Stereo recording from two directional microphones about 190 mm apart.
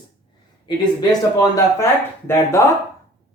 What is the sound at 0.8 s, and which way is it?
Speech, 20° left (ahead or behind).